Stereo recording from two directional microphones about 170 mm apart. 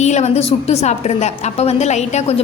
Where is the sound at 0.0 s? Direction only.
40° left (ahead or behind).